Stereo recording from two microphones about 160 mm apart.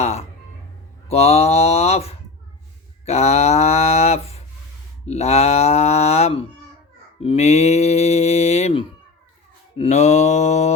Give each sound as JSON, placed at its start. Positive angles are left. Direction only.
{"t": 0.0, "sound": "mantra", "side_deg": 45}
{"t": 1.0, "sound": "speech", "side_deg": 40}
{"t": 3.1, "sound": "a sound", "side_deg": 45}
{"t": 5.0, "sound": "speech", "side_deg": 40}
{"t": 7.2, "sound": "mantra", "side_deg": 40}